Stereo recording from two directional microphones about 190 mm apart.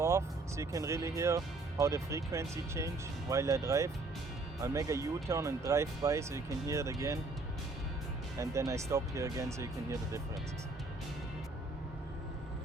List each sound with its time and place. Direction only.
0.0 s speech: 15° right (ahead or behind)
8.4 s speech: 15° right (ahead or behind)